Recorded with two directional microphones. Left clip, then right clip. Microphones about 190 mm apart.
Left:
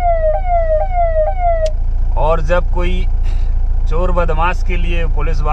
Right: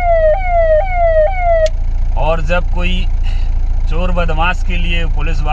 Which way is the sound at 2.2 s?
5° left (ahead or behind).